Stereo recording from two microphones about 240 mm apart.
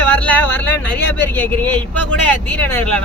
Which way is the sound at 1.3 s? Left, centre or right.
Centre.